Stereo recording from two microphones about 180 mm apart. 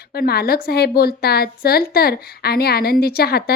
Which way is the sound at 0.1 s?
60° left (ahead or behind).